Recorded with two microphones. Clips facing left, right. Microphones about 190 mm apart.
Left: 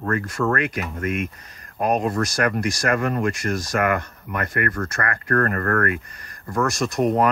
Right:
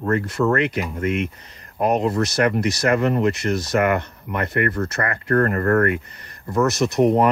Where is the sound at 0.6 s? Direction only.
75° right (ahead or behind).